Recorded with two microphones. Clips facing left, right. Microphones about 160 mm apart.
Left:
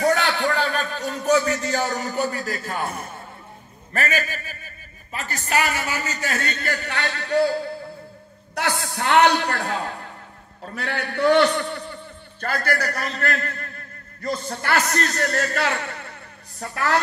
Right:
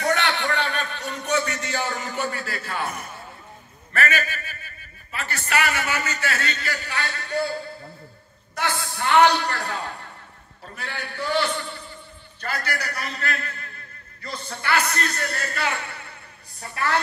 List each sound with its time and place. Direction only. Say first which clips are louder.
0.0 s a sound: left 3 dB; 40° left (ahead or behind)
3.9 s a man's voice: even; 35° left (ahead or behind); by 7.5 s 65° left (ahead or behind)
8.5 s a man's voice: left 2 dB; 75° left (ahead or behind)
12.4 s a man's voice: left 5 dB; 50° left (ahead or behind)